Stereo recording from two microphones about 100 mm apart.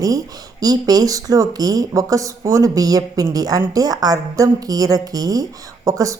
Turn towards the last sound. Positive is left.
turn(degrees=-35)  # may be behind; listen again after turning